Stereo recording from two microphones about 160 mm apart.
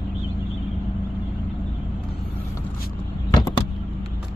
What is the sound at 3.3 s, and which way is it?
Vehicle, 25° left (ahead or behind).